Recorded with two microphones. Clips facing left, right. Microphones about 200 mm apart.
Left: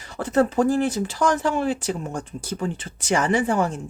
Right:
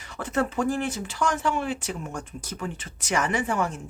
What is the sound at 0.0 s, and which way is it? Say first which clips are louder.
Speech: left 6 dB; 35° left (ahead or behind).